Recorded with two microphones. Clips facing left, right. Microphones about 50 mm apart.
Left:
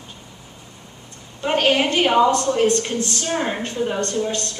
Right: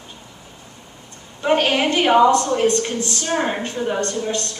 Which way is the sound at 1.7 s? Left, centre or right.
Centre.